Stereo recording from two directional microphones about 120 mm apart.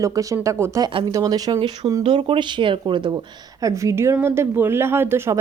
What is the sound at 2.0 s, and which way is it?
Speech, 45° right (ahead or behind).